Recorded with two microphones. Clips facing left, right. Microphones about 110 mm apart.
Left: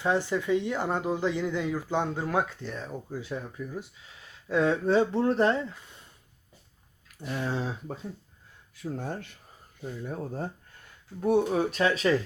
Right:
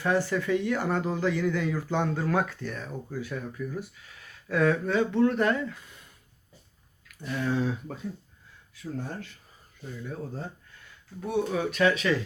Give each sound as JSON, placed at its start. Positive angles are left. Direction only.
{"t": 0.0, "sound": "speech", "side_deg": 20}
{"t": 7.3, "sound": "speech", "side_deg": 30}
{"t": 8.7, "sound": "speech", "side_deg": 55}